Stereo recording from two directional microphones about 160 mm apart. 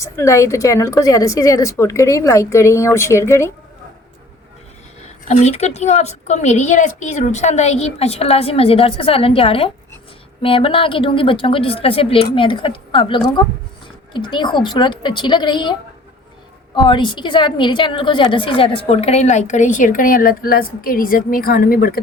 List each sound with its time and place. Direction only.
0.0 s a woman's voice: 20° left (ahead or behind)
5.3 s a woman's voice: 45° left (ahead or behind); by 22.0 s 70° left (ahead or behind)